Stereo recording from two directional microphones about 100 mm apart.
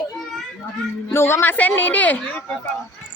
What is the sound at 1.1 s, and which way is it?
Speech, 25° left (ahead or behind).